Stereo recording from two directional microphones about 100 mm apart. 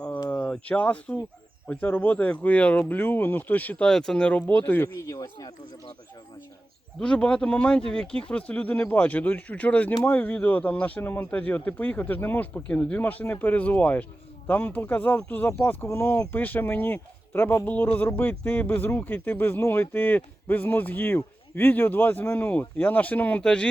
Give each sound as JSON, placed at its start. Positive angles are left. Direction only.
{"t": 0.4, "sound": "speech", "side_deg": 10}
{"t": 4.9, "sound": "speech", "side_deg": 30}
{"t": 7.0, "sound": "speech", "side_deg": 10}